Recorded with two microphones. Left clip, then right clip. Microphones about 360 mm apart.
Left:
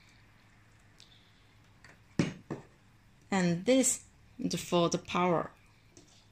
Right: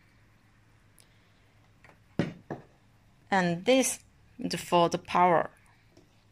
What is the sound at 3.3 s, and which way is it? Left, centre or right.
Speech, right.